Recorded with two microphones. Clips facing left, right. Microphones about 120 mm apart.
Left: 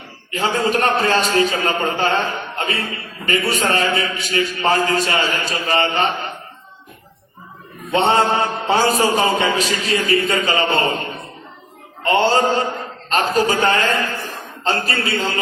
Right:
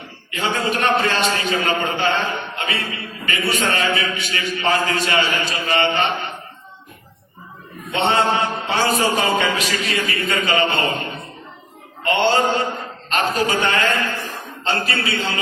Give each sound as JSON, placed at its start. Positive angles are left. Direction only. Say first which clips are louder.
{"t": 0.3, "sound": "a man's voice", "louder": "left 3 dB", "side_deg": 40}
{"t": 7.9, "sound": "a man's voice", "louder": "left 2 dB", "side_deg": 40}
{"t": 12.0, "sound": "a man's voice", "louder": "left 2 dB", "side_deg": 35}